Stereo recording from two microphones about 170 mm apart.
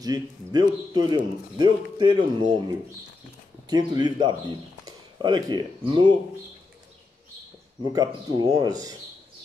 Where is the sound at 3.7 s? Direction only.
25° right (ahead or behind).